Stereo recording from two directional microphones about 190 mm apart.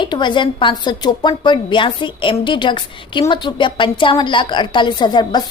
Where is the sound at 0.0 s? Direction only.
25° left (ahead or behind).